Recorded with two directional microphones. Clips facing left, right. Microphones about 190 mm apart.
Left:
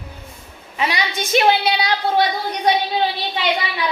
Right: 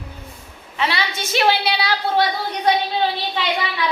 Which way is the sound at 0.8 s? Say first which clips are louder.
Left 1 dB; 15° left (ahead or behind).